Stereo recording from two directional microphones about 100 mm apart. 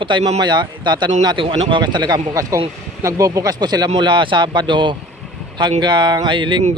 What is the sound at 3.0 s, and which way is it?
Speech, 30° right (ahead or behind).